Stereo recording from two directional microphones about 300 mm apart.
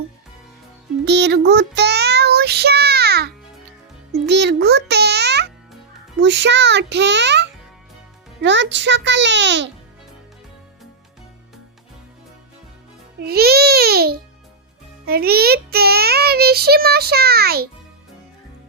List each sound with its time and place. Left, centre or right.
1.0 s child singing: right
4.3 s music for children: right
6.2 s a child's voice: right
13.2 s a child's voice: right